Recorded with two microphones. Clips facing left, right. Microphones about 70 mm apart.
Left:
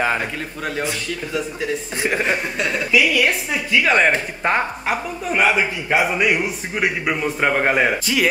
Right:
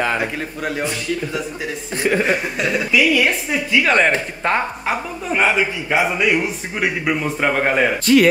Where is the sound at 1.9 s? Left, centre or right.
Centre.